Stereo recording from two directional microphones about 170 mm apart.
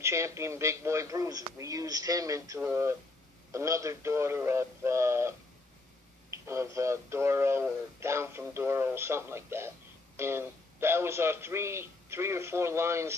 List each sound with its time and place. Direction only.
0.0 s speech: 15° right (ahead or behind)
6.3 s speech: 15° right (ahead or behind)